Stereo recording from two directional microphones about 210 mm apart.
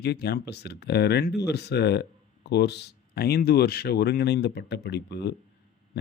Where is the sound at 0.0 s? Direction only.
50° left (ahead or behind).